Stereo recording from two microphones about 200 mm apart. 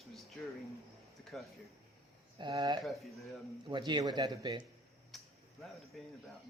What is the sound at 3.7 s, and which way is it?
Speech, 20° right (ahead or behind).